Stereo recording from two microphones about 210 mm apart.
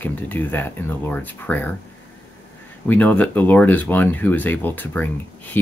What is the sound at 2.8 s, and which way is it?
Speech, 5° left (ahead or behind).